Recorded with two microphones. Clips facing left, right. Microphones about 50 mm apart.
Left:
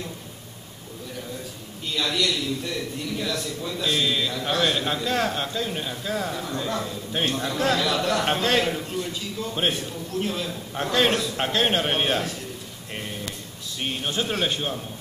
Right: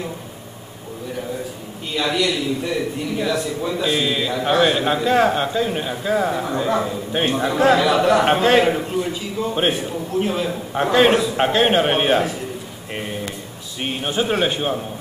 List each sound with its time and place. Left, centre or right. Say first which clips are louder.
2.0 s a man's voice: right 5 dB; centre
12.9 s a sound: right 6 dB; centre
13.7 s a man's voice: right 5 dB; centre